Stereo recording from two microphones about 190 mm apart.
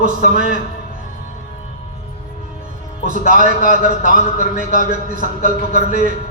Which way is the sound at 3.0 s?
45° right (ahead or behind).